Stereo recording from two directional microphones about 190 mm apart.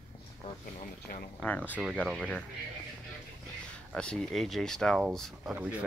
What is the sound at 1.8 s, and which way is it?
Speech, centre (ahead or behind).